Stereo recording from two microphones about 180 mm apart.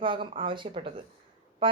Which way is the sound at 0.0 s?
30° right (ahead or behind).